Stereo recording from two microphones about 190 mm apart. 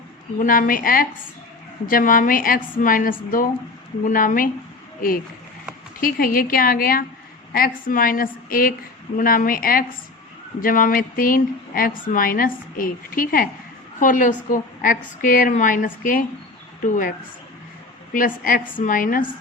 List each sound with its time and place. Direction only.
0.3 s a woman's voice: 45° left (ahead or behind)
18.8 s a woman's voice: 45° left (ahead or behind)